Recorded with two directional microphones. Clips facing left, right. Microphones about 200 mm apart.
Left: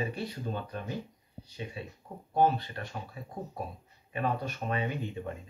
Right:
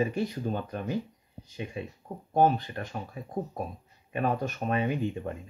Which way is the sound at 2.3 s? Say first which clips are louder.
Right 3 dB; 45° right (ahead or behind).